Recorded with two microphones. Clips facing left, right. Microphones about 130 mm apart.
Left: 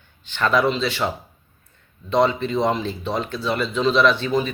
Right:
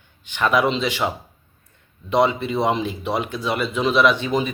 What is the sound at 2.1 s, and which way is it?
Speech, 15° right (ahead or behind).